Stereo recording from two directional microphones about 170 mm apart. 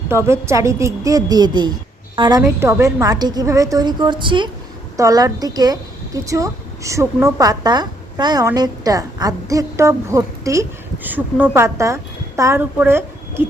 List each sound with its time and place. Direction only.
0.1 s a woman's voice: 15° right (ahead or behind)
2.6 s a woman's voice: 15° right (ahead or behind)